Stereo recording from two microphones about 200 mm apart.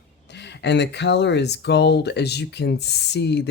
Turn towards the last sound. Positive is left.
turn(degrees=60)  # may be behind; listen again after turning